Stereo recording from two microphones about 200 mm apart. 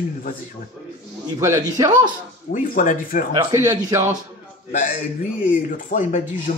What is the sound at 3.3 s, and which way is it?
Speech, 15° right (ahead or behind).